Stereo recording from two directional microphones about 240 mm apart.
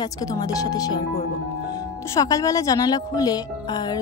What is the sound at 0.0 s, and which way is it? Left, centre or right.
A woman's voice, centre.